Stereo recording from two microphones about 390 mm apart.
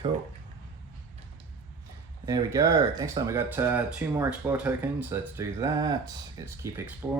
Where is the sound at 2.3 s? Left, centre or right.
Centre.